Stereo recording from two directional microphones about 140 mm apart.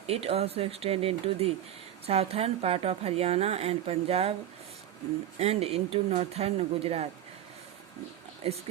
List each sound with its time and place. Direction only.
0.1 s a woman's voice: 45° right (ahead or behind)
5.4 s a woman's voice: 45° right (ahead or behind)
8.4 s a woman's voice: 45° right (ahead or behind)